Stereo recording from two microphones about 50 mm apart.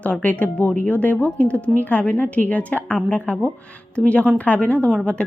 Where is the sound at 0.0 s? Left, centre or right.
Left.